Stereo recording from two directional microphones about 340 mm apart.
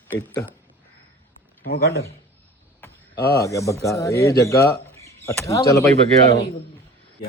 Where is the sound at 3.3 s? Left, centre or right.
Centre.